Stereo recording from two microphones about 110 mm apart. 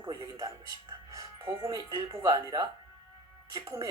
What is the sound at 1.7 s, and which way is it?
Speech, 40° right (ahead or behind).